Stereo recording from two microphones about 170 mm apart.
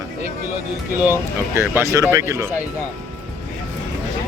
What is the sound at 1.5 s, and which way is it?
Speech, 15° right (ahead or behind).